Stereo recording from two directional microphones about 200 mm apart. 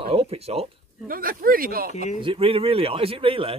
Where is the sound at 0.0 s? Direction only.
30° right (ahead or behind).